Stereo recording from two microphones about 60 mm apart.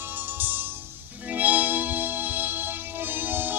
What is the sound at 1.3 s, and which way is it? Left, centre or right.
Music, right.